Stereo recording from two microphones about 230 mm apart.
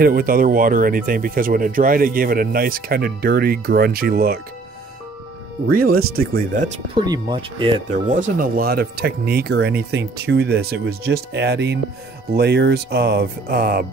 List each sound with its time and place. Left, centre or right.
0.0 s speech: right
5.7 s speech: right
7.0 s speech: centre
7.9 s speech: right